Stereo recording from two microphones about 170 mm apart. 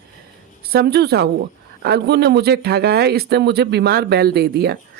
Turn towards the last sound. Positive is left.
turn(degrees=-70)  # may be behind; listen again after turning